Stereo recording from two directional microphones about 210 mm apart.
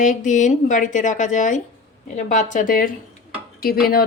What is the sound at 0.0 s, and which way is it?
Speech, 35° left (ahead or behind).